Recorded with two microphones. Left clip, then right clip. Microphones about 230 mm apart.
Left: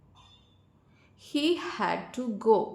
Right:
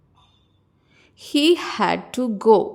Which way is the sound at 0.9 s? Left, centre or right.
Right.